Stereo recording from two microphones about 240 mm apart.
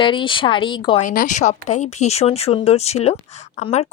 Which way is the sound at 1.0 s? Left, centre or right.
Left.